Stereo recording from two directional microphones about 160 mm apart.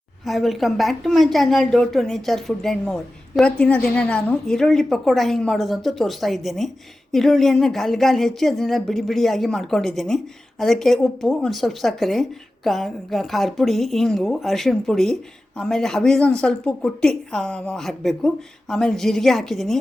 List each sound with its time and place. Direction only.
0.3 s a woman's voice: centre (ahead or behind)